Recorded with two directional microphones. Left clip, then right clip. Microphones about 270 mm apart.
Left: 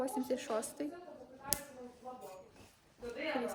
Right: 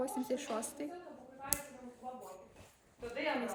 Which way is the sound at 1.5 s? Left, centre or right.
Left.